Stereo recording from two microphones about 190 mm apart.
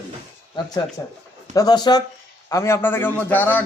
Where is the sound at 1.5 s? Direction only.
20° left (ahead or behind).